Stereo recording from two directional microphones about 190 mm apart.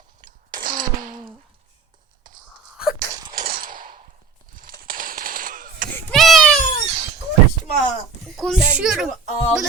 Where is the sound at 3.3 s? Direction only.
50° right (ahead or behind).